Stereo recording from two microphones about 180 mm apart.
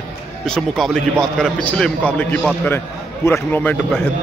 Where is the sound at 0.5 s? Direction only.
Centre (ahead or behind).